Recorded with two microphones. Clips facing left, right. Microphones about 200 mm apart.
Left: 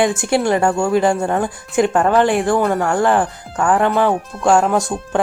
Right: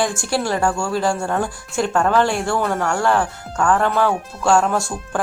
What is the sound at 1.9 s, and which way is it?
Speech, 5° left (ahead or behind).